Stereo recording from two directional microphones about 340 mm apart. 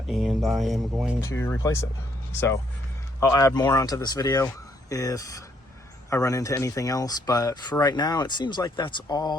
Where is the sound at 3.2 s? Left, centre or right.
Centre.